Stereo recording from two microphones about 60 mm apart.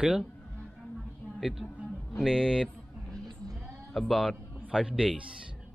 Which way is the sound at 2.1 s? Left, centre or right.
Centre.